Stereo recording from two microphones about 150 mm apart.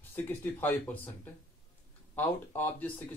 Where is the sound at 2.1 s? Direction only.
15° left (ahead or behind).